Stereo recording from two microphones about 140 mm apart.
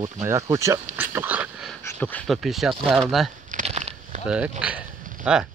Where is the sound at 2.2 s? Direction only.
Centre (ahead or behind).